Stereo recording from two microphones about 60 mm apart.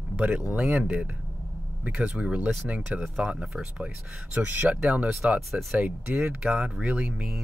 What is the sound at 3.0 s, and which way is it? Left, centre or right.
Speech, centre.